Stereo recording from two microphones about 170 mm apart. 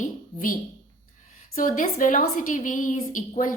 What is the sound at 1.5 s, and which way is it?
A woman's voice, 50° left (ahead or behind).